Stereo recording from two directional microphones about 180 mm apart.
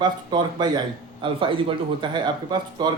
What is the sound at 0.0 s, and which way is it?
Speech, 25° right (ahead or behind).